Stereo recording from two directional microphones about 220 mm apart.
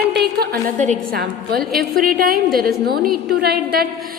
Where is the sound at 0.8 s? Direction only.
35° right (ahead or behind).